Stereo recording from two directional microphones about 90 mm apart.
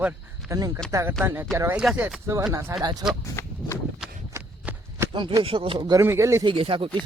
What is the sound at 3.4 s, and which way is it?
Walk, 30° left (ahead or behind).